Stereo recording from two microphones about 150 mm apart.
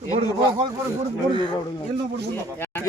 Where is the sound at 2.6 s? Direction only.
15° left (ahead or behind).